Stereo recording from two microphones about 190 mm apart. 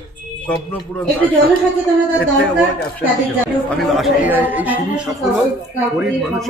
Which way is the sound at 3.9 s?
Centre (ahead or behind).